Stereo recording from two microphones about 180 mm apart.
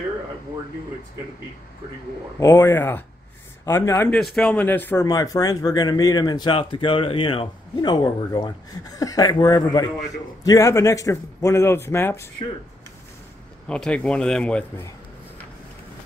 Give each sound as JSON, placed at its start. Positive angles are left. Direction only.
{"t": 2.4, "sound": "speech", "side_deg": 15}
{"t": 13.7, "sound": "a man's voice", "side_deg": 5}